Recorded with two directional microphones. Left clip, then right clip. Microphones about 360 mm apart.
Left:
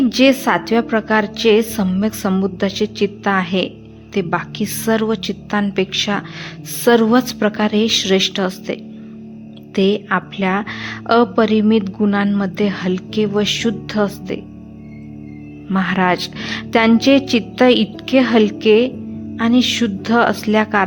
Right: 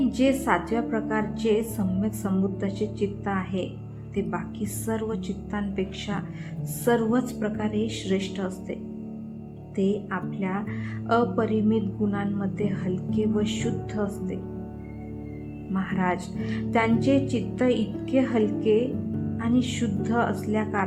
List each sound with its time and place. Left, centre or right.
0.2 s a woman's voice: centre
15.7 s a woman's voice: left